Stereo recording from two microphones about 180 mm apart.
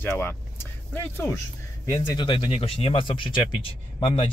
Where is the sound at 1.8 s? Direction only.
25° left (ahead or behind).